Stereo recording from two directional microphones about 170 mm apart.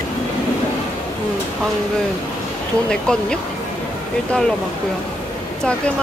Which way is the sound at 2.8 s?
5° left (ahead or behind).